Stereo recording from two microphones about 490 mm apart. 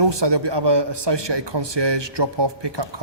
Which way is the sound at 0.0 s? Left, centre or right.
Right.